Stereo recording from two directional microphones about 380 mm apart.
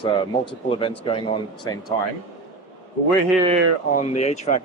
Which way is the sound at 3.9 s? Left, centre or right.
Centre.